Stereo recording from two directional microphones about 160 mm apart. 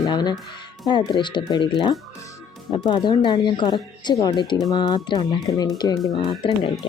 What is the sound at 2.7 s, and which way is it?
Speech, 30° left (ahead or behind).